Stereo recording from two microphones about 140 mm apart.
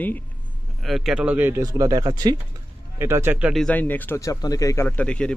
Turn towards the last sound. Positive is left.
turn(degrees=10)  # may be behind; listen again after turning